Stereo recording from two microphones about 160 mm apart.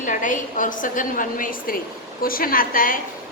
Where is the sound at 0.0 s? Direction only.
55° left (ahead or behind).